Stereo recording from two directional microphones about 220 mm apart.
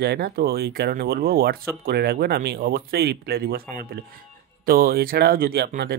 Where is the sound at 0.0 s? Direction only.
45° right (ahead or behind).